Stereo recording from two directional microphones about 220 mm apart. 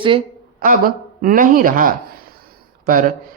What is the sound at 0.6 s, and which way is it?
Speech, 40° right (ahead or behind).